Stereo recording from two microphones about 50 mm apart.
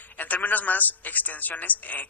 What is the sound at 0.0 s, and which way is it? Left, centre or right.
A woman's voice, left.